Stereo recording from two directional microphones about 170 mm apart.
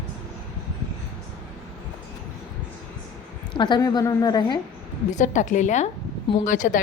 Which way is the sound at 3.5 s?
25° left (ahead or behind).